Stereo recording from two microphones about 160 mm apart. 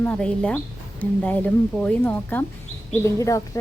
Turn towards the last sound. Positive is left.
turn(degrees=20)  # may be behind; listen again after turning